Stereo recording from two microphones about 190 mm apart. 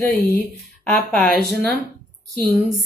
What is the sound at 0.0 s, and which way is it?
Speech, 15° left (ahead or behind).